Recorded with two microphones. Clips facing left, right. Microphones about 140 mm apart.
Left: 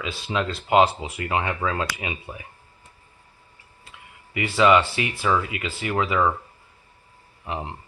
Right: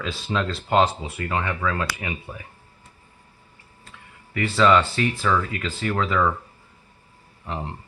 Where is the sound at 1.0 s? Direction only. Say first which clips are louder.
Left 1 dB; 15° left (ahead or behind).